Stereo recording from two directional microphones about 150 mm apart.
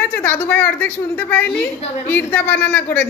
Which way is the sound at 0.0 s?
10° left (ahead or behind).